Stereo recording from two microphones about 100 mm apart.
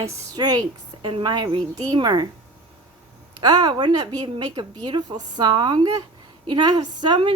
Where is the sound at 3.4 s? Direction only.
45° right (ahead or behind).